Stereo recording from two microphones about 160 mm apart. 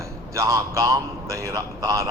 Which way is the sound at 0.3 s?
20° right (ahead or behind).